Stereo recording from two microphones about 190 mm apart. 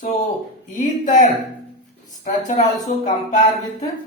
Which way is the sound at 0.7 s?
45° left (ahead or behind).